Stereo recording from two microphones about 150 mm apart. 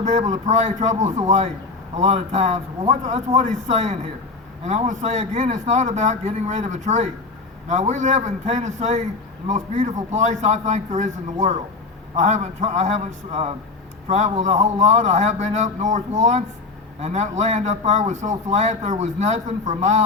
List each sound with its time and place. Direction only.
0.0 s a man's voice: 50° right (ahead or behind)